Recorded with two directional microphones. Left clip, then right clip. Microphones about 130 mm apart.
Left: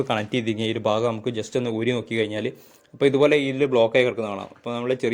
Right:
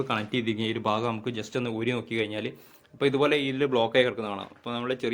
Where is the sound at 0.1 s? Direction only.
40° left (ahead or behind).